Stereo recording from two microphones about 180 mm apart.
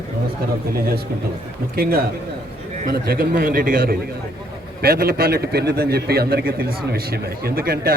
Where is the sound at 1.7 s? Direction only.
55° right (ahead or behind).